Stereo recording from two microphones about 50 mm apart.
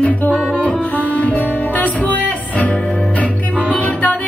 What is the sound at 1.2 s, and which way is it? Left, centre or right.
Music, left.